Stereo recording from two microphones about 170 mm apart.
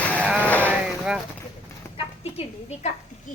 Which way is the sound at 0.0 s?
10° left (ahead or behind).